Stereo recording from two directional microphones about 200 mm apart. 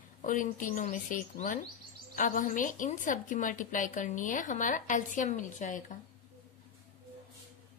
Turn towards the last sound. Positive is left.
turn(degrees=40)  # may be behind; listen again after turning